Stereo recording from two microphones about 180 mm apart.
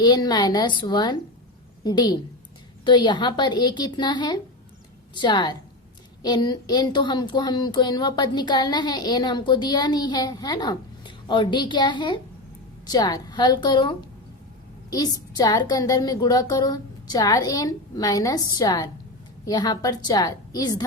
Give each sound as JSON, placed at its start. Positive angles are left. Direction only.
{"t": 0.0, "sound": "speech", "side_deg": 20}